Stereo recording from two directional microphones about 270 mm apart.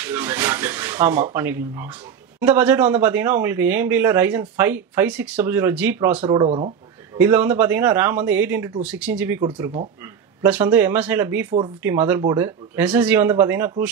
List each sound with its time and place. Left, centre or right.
0.0 s speech: centre
6.4 s speech: right
7.2 s speech: centre